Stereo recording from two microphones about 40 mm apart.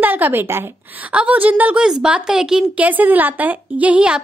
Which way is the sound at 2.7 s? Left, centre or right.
Right.